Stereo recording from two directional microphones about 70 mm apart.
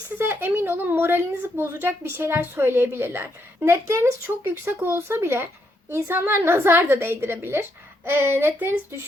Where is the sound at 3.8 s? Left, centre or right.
Right.